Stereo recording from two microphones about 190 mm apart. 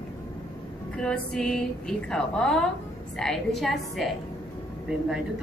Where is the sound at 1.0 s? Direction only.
5° left (ahead or behind).